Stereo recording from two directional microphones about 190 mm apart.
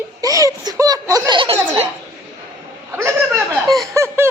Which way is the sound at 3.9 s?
15° right (ahead or behind).